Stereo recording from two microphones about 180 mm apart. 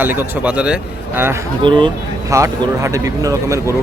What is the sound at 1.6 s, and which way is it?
Speech, 25° right (ahead or behind).